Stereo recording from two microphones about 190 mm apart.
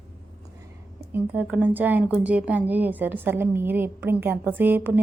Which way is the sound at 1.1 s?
10° right (ahead or behind).